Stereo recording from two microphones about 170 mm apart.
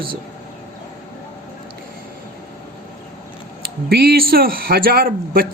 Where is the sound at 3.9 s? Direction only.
65° right (ahead or behind).